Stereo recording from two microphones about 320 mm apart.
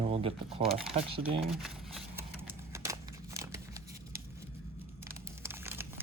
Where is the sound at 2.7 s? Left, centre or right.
Centre.